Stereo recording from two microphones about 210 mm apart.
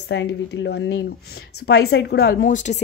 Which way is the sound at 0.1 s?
60° left (ahead or behind).